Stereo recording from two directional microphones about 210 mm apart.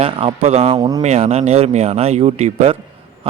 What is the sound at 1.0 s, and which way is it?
Speech, 30° right (ahead or behind).